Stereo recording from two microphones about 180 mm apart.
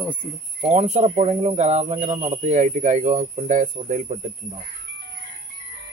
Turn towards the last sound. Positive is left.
turn(degrees=-40)  # may be behind; listen again after turning